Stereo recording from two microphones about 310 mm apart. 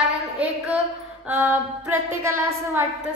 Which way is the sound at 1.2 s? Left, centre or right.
Centre.